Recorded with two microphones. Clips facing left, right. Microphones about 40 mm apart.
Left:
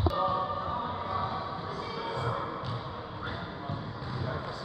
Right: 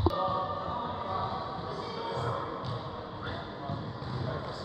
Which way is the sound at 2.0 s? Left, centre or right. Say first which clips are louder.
Even; left.